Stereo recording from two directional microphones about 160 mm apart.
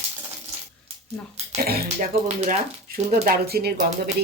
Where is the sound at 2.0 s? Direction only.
50° right (ahead or behind).